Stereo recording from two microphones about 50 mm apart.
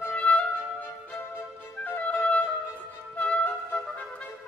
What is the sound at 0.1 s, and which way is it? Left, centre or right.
Music, left.